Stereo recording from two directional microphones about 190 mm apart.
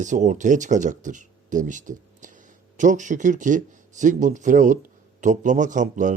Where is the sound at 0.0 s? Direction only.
40° right (ahead or behind).